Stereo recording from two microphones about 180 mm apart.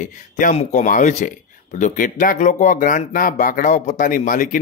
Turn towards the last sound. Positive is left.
turn(degrees=50)  # may be behind; listen again after turning